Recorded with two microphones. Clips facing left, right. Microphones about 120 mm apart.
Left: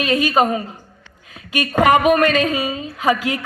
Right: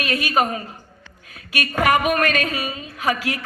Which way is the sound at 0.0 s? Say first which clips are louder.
Left 5 dB; 25° left (ahead or behind).